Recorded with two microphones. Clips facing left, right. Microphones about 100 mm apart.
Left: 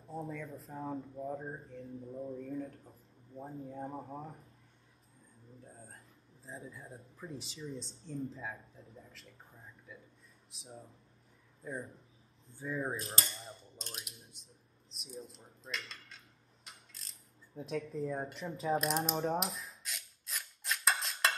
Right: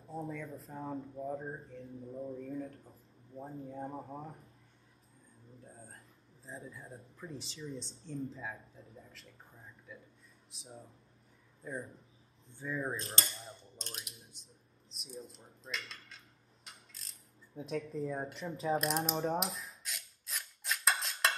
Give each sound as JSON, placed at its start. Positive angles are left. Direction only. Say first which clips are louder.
{"t": 0.0, "sound": "speech", "louder": "right 1 dB", "side_deg": 0}
{"t": 5.6, "sound": "a man's voice", "louder": "even", "side_deg": 0}
{"t": 12.5, "sound": "cap gun", "louder": "even", "side_deg": 5}
{"t": 16.6, "sound": "a sound", "louder": "even", "side_deg": 0}